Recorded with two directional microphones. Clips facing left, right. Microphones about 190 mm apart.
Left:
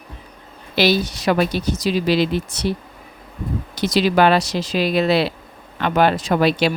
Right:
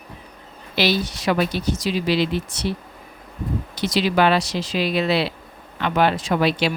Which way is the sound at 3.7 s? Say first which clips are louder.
Left 3 dB; 40° left (ahead or behind).